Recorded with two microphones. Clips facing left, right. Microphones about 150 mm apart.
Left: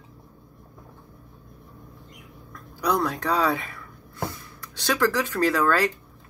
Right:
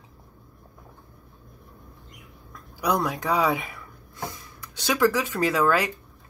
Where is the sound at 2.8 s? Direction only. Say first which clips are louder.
Left 1 dB; 15° right (ahead or behind).